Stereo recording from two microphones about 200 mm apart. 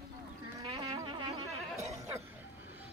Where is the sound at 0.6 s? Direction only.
25° right (ahead or behind).